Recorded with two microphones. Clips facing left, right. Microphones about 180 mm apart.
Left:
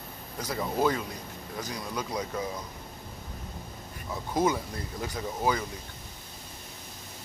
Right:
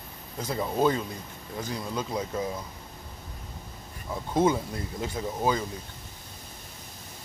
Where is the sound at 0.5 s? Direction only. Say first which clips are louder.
Right 2 dB; 25° right (ahead or behind).